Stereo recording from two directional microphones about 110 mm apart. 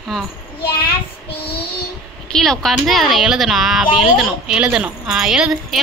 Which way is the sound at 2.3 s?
5° left (ahead or behind).